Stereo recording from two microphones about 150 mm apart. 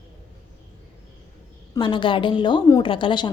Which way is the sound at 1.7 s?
35° left (ahead or behind).